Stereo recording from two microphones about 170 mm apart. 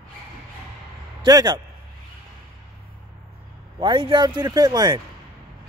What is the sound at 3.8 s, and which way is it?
A man's voice, 30° right (ahead or behind).